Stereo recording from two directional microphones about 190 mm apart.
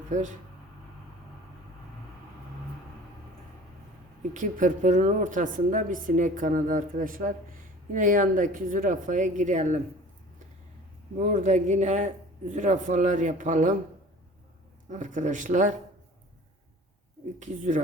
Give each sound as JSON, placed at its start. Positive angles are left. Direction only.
{"t": 0.1, "sound": "speech", "side_deg": -40}
{"t": 4.4, "sound": "a woman's voice", "side_deg": -40}
{"t": 11.2, "sound": "speech", "side_deg": -40}
{"t": 14.8, "sound": "speech", "side_deg": -40}
{"t": 17.4, "sound": "speech", "side_deg": -40}